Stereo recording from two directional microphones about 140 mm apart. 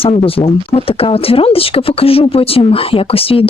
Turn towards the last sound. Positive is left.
turn(degrees=40)  # may be behind; listen again after turning